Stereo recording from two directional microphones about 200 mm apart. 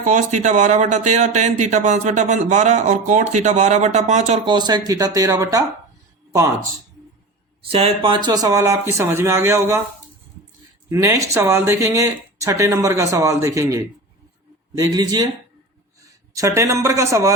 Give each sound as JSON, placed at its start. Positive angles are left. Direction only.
{"t": 0.0, "sound": "speech", "side_deg": -40}
{"t": 4.4, "sound": "speech", "side_deg": -20}
{"t": 7.7, "sound": "speech", "side_deg": -30}
{"t": 10.8, "sound": "speech", "side_deg": -15}
{"t": 16.3, "sound": "speech", "side_deg": -15}